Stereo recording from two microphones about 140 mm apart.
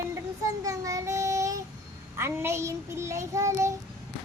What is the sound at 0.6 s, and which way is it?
Child singing, 25° right (ahead or behind).